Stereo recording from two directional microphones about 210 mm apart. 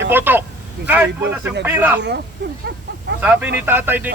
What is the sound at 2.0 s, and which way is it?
Speech, 55° right (ahead or behind).